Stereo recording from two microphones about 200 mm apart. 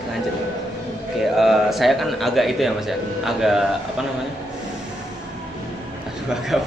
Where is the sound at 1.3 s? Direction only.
Centre (ahead or behind).